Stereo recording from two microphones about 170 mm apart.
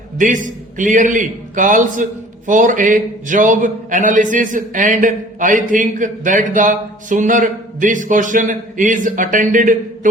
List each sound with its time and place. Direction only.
0.2 s a man's voice: 50° right (ahead or behind)